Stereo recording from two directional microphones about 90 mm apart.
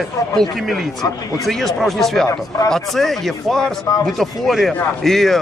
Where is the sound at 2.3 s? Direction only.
40° left (ahead or behind).